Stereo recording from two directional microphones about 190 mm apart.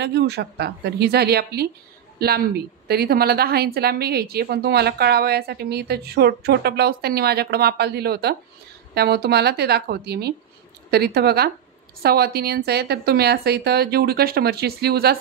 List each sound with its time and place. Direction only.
0.0 s a woman's voice: 60° right (ahead or behind)